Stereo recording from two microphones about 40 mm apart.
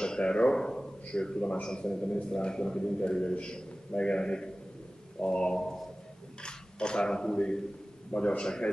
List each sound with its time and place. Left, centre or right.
0.0 s a man's voice: left